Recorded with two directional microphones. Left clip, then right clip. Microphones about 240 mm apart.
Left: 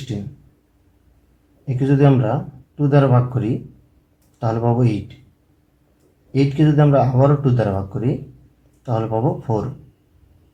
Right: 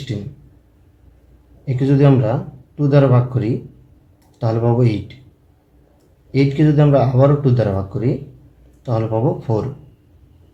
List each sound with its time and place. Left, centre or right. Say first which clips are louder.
0.1 s speech: even; right
1.6 s speech: right 1 dB; centre
6.3 s speech: right 2 dB; right